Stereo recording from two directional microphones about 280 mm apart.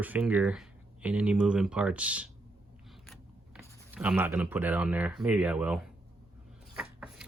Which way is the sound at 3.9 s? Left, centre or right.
Centre.